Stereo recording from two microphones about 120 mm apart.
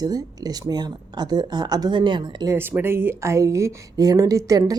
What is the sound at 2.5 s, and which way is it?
A woman's voice, 15° right (ahead or behind).